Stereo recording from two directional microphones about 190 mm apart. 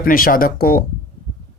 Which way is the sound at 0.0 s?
50° left (ahead or behind).